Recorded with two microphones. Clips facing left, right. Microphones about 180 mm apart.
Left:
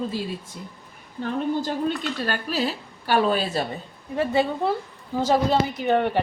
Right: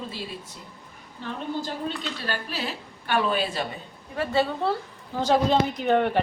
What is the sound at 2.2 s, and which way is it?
A woman's voice, 45° left (ahead or behind).